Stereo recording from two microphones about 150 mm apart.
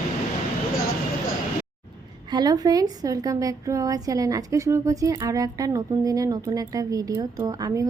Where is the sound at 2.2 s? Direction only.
25° right (ahead or behind).